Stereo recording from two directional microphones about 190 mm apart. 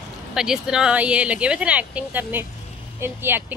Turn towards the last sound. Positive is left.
turn(degrees=-10)  # may be behind; listen again after turning